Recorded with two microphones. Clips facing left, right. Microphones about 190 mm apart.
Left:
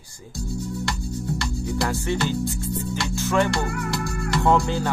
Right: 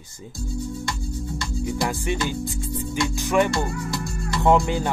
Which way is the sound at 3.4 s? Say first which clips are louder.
Even; 70° left (ahead or behind).